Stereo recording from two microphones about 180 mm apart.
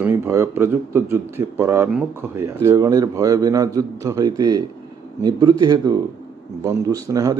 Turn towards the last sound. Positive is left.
turn(degrees=-20)  # may be behind; listen again after turning